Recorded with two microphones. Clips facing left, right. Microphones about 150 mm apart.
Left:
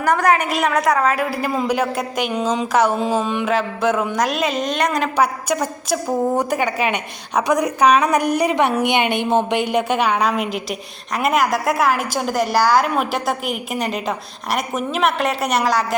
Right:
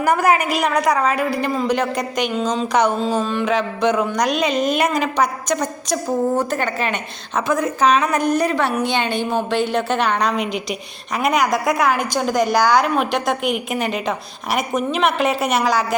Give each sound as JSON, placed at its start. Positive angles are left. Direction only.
{"t": 0.0, "sound": "a woman's voice", "side_deg": -5}